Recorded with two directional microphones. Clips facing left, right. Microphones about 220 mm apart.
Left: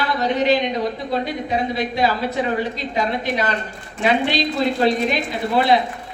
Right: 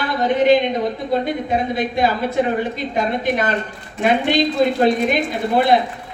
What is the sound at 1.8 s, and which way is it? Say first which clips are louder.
A woman's voice: right 2 dB; 50° right (ahead or behind).